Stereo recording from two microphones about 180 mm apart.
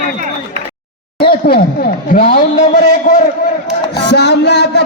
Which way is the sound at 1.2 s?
60° left (ahead or behind).